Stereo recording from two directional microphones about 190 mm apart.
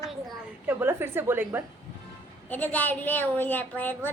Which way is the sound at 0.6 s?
10° right (ahead or behind).